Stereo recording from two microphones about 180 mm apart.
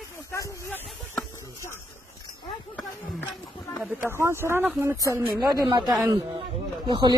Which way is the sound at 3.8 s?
10° right (ahead or behind).